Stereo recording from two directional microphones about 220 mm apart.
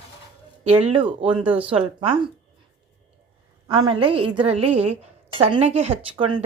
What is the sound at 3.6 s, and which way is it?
A woman's voice, 20° right (ahead or behind).